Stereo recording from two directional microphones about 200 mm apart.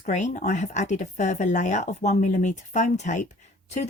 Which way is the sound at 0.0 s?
35° left (ahead or behind).